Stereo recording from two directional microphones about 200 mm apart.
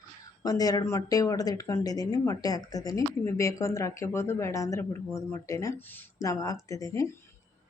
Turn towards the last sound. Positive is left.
turn(degrees=15)  # may be behind; listen again after turning